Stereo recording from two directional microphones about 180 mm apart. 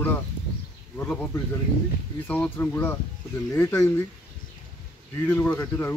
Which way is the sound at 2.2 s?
10° left (ahead or behind).